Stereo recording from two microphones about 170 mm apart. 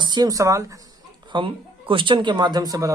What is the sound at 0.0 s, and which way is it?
Speech, 25° right (ahead or behind).